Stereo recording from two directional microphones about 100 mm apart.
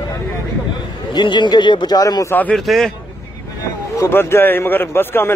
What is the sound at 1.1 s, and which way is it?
A man's voice, 50° left (ahead or behind).